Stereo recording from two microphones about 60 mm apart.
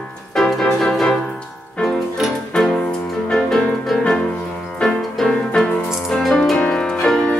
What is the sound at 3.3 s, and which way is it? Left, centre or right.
Music, centre.